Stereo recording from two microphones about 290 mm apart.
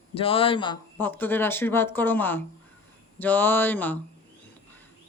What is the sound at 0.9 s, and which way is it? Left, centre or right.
Speech, centre.